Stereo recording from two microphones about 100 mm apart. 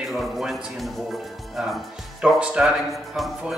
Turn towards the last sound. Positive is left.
turn(degrees=-5)  # may be behind; listen again after turning